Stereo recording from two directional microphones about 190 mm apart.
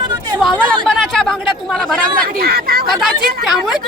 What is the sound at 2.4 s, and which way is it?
Speech, 55° right (ahead or behind).